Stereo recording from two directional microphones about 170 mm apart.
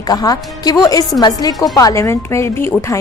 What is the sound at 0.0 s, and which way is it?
A woman's voice, 20° left (ahead or behind).